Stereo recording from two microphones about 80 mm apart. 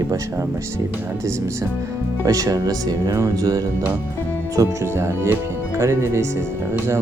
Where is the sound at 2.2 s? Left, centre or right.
Right.